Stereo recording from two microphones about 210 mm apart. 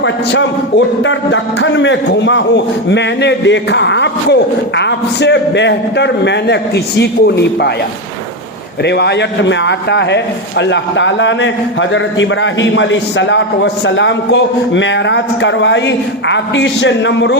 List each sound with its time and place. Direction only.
1.0 s a man's voice: 60° left (ahead or behind)
8.8 s a man's voice: 55° left (ahead or behind)